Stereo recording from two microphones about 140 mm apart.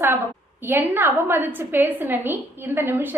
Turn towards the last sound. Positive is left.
turn(degrees=-15)  # may be behind; listen again after turning